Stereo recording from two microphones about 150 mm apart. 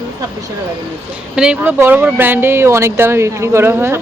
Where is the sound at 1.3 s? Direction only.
5° right (ahead or behind).